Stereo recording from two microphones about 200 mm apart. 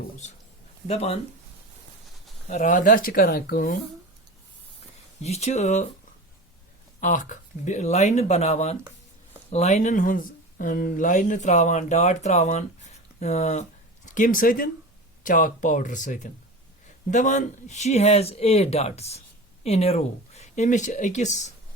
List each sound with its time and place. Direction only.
0.9 s speech: 30° left (ahead or behind)
2.5 s speech: 40° left (ahead or behind)
5.2 s speech: 35° left (ahead or behind)
7.0 s speech: 40° left (ahead or behind)